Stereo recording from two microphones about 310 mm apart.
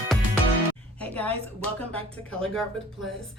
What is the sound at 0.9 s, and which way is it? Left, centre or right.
Speech, centre.